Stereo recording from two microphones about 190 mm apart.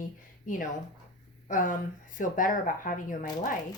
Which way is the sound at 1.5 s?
45° left (ahead or behind).